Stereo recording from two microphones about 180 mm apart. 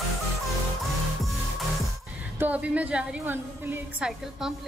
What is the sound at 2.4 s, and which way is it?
A woman's voice, 10° right (ahead or behind).